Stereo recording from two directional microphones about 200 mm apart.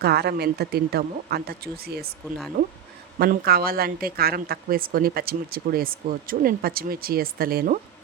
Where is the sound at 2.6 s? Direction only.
35° right (ahead or behind).